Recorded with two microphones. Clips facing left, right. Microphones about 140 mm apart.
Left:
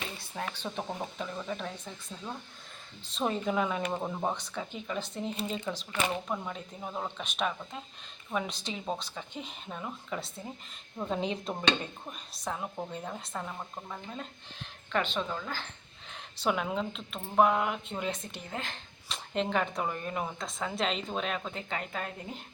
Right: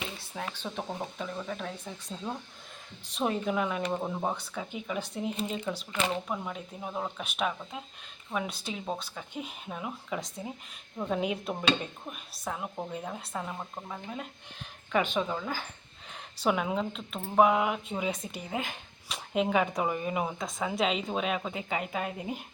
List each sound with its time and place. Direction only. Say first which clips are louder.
0.0 s speech: even; 5° right (ahead or behind)
3.1 s speech: right 1 dB; 10° right (ahead or behind)
10.9 s speech: right 2 dB; 5° left (ahead or behind)
11.2 s speech: right 2 dB; 5° right (ahead or behind)